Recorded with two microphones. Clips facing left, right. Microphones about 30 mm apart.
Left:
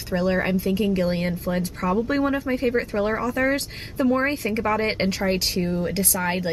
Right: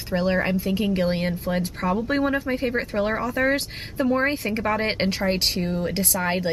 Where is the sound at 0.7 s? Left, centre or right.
Right.